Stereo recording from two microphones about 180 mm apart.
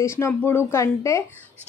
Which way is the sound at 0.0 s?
15° left (ahead or behind).